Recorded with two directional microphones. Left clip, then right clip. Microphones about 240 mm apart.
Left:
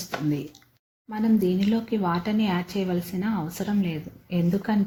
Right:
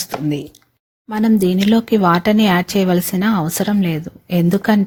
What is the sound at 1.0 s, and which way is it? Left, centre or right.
Speech, right.